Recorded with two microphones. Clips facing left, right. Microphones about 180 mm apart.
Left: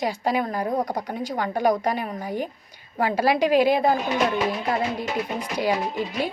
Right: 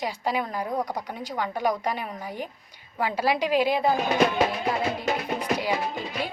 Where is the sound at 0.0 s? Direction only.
45° left (ahead or behind).